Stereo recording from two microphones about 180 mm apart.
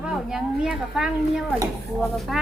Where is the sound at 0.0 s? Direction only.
5° right (ahead or behind).